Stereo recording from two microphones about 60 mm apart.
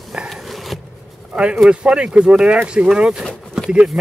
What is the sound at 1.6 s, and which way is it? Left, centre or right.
Speech, centre.